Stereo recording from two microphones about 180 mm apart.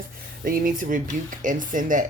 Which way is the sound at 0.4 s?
50° right (ahead or behind).